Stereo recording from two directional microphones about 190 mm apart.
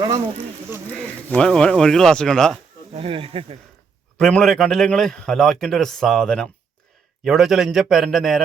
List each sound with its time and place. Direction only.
0.9 s a man's voice: 5° left (ahead or behind)
2.9 s speech: 30° right (ahead or behind)
4.2 s a man's voice: 5° left (ahead or behind)